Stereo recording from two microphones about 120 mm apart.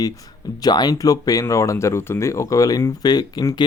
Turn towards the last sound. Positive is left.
turn(degrees=35)  # may be behind; listen again after turning